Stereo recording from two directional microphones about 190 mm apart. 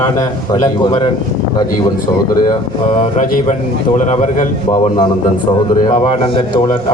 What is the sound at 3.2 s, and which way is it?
A man's voice, 40° left (ahead or behind).